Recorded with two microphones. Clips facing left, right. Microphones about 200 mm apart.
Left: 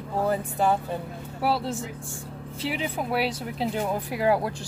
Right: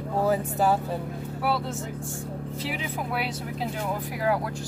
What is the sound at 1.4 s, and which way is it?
Speech, 30° left (ahead or behind).